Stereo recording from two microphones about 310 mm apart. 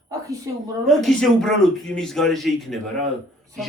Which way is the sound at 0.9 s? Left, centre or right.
Centre.